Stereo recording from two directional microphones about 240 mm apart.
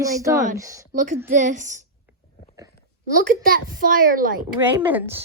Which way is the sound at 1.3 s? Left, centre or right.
Right.